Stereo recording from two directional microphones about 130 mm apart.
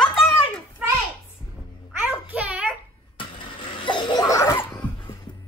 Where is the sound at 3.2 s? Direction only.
40° left (ahead or behind); by 4.6 s 25° left (ahead or behind).